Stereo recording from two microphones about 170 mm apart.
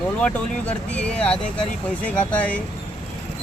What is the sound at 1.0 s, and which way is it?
Speech, 5° left (ahead or behind).